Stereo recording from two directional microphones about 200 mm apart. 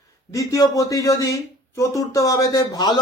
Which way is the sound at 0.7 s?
15° left (ahead or behind).